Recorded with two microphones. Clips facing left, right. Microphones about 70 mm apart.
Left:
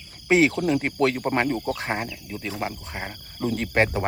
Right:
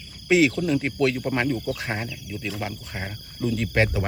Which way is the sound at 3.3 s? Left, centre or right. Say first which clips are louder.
Left 1 dB; left.